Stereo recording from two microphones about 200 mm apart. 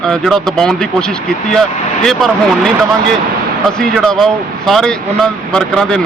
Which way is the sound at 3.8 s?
Centre (ahead or behind).